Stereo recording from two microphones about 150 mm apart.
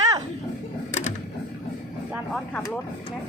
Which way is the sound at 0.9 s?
50° left (ahead or behind).